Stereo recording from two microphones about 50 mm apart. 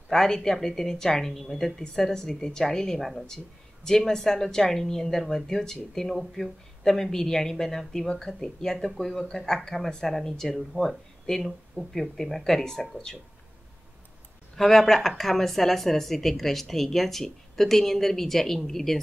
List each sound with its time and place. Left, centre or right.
0.1 s a woman's voice: centre
10.8 s speech: right
11.4 s a woman's voice: centre
14.6 s a woman's voice: centre